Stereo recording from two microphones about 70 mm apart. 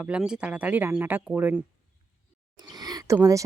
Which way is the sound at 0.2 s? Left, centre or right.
Centre.